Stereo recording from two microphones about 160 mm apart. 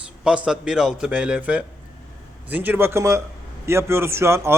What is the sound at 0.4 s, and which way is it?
A man's voice, 5° right (ahead or behind).